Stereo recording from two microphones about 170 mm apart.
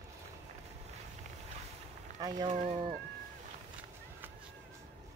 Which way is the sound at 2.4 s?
40° right (ahead or behind).